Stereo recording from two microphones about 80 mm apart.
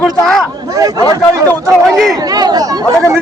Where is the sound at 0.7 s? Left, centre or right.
Right.